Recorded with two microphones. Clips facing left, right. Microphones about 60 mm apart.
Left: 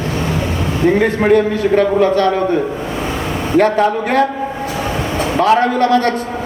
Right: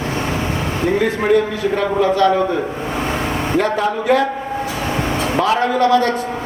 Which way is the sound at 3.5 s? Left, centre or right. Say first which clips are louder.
Left 6 dB; left.